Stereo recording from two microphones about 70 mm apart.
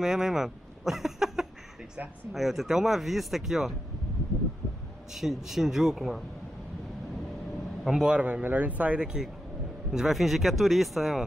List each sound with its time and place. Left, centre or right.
0.0 s a sound: centre
2.3 s speech: centre
5.1 s speech: centre
7.8 s speech: centre